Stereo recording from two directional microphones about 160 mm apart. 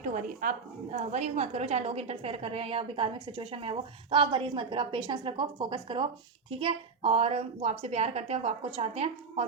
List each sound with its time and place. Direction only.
0.0 s a woman's voice: 55° right (ahead or behind); by 9.4 s 40° right (ahead or behind)